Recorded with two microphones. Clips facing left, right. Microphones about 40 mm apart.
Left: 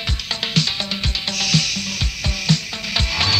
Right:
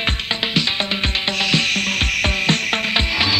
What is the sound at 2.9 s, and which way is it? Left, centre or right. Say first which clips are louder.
Music: left 1 dB; right.